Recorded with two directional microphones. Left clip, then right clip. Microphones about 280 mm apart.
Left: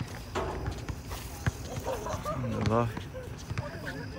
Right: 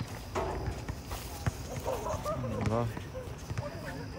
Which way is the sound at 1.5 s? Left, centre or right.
Centre.